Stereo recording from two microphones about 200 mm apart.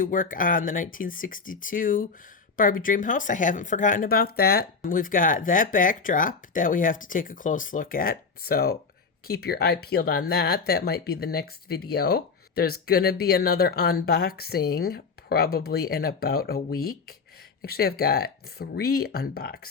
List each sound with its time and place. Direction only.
0.0 s speech: 45° left (ahead or behind)